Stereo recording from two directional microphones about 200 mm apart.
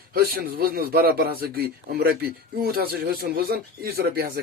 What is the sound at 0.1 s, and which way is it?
Speech, 50° right (ahead or behind).